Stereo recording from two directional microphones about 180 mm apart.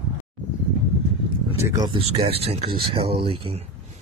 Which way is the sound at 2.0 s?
35° right (ahead or behind).